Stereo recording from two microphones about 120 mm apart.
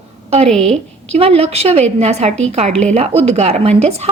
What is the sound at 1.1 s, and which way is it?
A woman's voice, 60° right (ahead or behind).